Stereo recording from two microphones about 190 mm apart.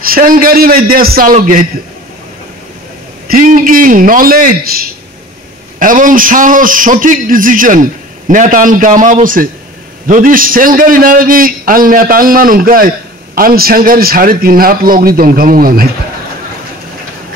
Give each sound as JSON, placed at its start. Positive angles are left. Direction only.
{"t": 0.0, "sound": "a man's voice", "side_deg": -50}
{"t": 3.3, "sound": "a man's voice", "side_deg": -45}
{"t": 5.8, "sound": "a man's voice", "side_deg": -45}